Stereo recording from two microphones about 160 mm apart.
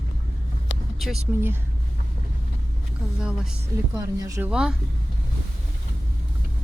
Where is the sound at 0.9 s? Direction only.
Centre (ahead or behind).